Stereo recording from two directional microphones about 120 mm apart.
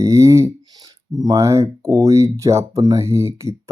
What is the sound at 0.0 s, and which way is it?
Speech, 25° right (ahead or behind).